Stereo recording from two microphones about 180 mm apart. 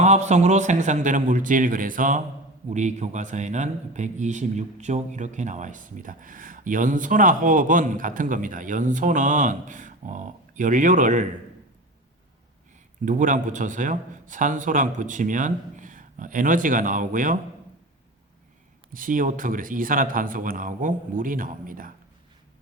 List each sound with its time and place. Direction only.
0.0 s a man's voice: 40° right (ahead or behind)
13.1 s a man's voice: 45° right (ahead or behind)
18.9 s a man's voice: 50° right (ahead or behind)